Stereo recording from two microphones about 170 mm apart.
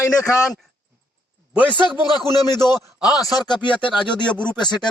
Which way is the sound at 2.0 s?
25° left (ahead or behind).